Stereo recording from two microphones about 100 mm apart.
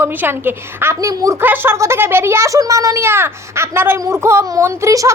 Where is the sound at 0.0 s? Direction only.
20° right (ahead or behind).